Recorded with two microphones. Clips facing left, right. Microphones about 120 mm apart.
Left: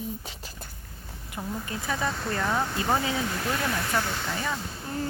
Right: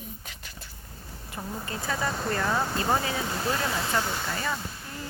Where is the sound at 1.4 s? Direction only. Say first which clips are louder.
Left 2 dB; 5° left (ahead or behind).